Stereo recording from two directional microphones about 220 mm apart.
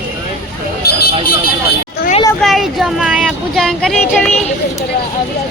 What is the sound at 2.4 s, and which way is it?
Speech, centre (ahead or behind).